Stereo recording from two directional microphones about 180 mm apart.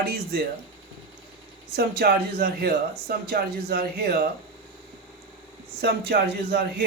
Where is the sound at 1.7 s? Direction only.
60° right (ahead or behind).